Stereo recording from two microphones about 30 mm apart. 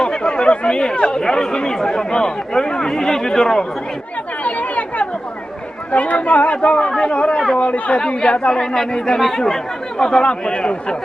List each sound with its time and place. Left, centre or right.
0.0 s speech: left
4.4 s chatter: left
5.9 s speech: left
8.0 s speech: left
9.1 s speech: centre
10.5 s speech: left